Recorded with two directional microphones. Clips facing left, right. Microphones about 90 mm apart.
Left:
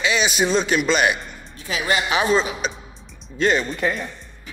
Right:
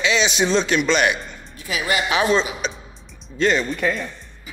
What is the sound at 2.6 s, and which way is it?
Music, 5° left (ahead or behind).